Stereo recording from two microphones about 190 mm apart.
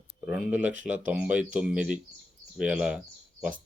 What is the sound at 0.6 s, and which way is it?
Speech, 40° right (ahead or behind).